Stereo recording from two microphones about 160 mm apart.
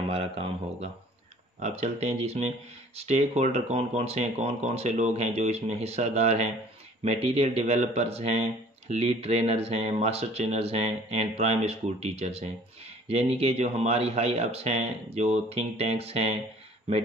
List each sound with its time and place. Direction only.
0.1 s speech: 35° right (ahead or behind)